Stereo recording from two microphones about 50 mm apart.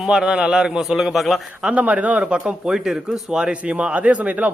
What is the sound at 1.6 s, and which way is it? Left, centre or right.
Speech, right.